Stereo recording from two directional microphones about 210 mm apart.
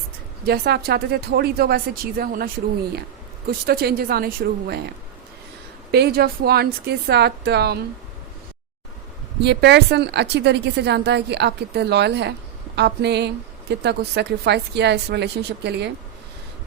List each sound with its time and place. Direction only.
0.4 s a woman's voice: 50° right (ahead or behind)
3.7 s a woman's voice: 45° right (ahead or behind)
9.4 s a woman's voice: 55° right (ahead or behind)